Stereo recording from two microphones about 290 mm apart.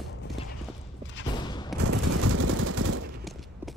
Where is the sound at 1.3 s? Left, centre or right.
Centre.